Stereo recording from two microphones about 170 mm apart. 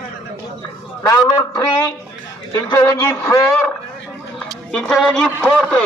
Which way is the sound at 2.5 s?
15° left (ahead or behind).